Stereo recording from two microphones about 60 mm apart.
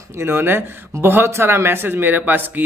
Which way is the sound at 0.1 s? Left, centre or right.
Right.